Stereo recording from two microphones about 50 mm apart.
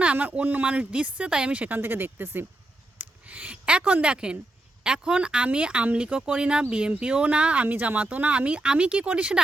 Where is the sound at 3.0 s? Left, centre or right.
Right.